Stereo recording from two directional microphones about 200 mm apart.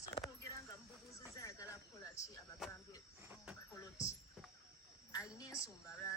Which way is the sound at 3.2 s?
5° right (ahead or behind).